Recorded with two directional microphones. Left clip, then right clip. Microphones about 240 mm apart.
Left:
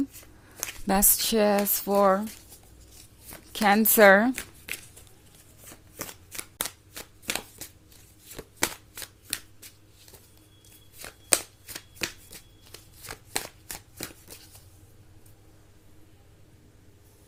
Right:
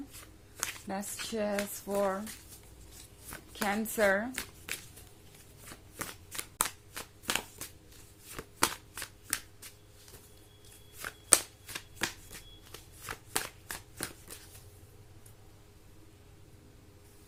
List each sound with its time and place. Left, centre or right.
0.9 s speech: left
3.5 s speech: left
4.4 s a sound: centre
5.6 s shuffling cards: centre
11.0 s shuffling cards: centre